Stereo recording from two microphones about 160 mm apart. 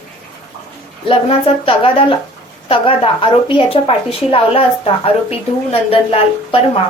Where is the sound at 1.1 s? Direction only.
35° left (ahead or behind).